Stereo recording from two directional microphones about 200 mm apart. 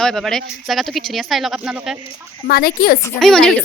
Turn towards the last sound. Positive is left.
turn(degrees=5)  # may be behind; listen again after turning